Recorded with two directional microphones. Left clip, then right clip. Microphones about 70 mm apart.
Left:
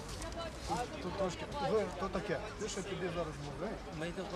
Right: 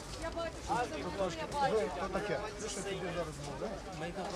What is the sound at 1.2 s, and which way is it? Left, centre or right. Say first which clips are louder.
Speech: right 4 dB; right.